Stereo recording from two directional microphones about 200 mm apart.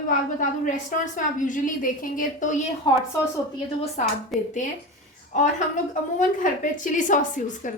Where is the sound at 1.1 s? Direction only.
40° left (ahead or behind).